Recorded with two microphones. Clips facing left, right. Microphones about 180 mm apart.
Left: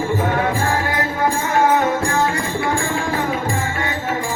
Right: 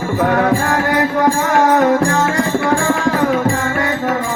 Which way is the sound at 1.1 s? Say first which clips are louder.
Right 2 dB; 75° right (ahead or behind).